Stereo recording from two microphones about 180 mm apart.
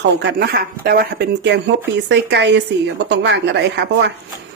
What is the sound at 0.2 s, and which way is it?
Speech, 60° right (ahead or behind).